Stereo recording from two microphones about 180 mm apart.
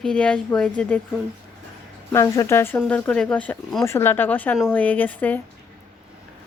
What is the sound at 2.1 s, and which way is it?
A woman's voice, 15° left (ahead or behind).